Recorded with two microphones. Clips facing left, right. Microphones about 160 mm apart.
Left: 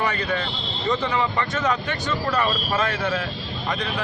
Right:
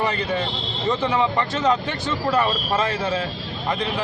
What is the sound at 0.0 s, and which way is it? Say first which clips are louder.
Speech: right 2 dB; 30° right (ahead or behind).